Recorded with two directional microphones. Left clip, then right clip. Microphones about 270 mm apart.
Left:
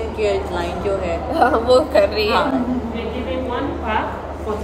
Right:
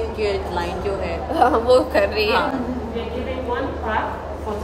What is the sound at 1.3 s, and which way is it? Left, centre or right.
Speech, right.